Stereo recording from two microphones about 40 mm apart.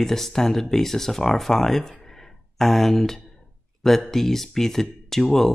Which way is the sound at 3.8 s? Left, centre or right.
Centre.